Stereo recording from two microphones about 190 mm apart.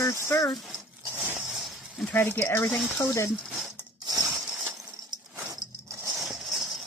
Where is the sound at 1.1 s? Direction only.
5° right (ahead or behind).